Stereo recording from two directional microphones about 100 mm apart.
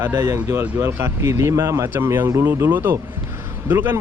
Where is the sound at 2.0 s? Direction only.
25° right (ahead or behind).